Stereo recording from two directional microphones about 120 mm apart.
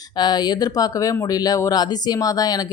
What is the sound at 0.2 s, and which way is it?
Speech, 35° left (ahead or behind).